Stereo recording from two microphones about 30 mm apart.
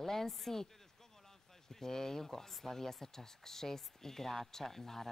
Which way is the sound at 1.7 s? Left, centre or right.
Centre.